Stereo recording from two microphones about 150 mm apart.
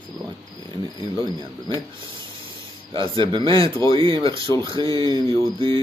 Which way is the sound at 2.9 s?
35° right (ahead or behind).